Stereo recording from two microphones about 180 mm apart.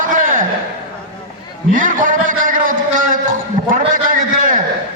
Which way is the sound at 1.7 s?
45° right (ahead or behind).